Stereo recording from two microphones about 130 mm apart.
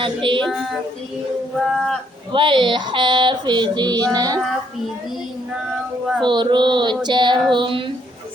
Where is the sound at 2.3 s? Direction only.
40° right (ahead or behind).